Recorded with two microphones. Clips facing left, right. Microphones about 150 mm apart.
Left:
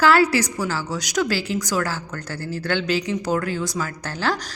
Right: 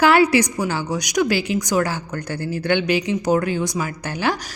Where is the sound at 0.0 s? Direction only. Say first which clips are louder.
Right 2 dB; 20° right (ahead or behind).